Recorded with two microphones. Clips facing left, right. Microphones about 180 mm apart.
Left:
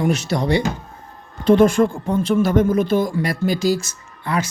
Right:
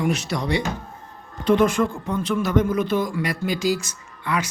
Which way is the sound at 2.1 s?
45° left (ahead or behind).